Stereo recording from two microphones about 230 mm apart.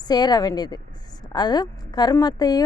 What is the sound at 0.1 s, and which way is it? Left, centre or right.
A woman's voice, centre.